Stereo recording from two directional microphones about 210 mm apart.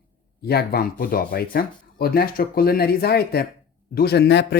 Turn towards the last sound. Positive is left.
turn(degrees=55)  # may be behind; listen again after turning